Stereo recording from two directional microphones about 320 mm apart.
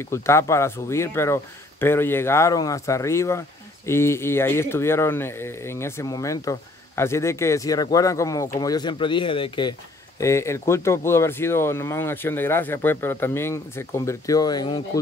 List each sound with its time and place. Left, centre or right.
0.0 s speech: centre